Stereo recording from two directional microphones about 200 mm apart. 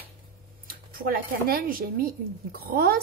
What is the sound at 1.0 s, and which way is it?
Speech, 45° right (ahead or behind).